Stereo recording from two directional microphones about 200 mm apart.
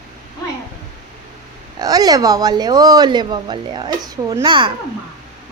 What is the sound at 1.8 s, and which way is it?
Speech, 20° right (ahead or behind).